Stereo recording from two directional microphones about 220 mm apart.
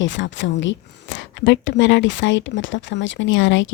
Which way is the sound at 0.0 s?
55° left (ahead or behind).